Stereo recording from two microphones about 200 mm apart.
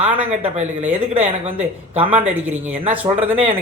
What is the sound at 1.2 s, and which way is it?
Speech, 30° right (ahead or behind).